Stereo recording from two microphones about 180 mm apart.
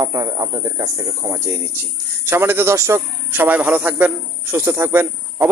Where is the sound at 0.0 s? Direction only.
20° right (ahead or behind).